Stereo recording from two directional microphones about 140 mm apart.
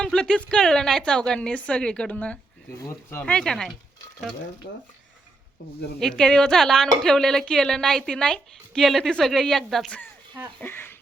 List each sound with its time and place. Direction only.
0.0 s a woman's voice: 5° left (ahead or behind)
6.0 s a woman's voice: 5° left (ahead or behind)
10.6 s speech: 15° left (ahead or behind)